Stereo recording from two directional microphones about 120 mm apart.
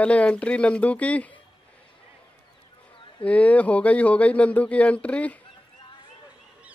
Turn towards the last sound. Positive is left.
turn(degrees=10)  # may be behind; listen again after turning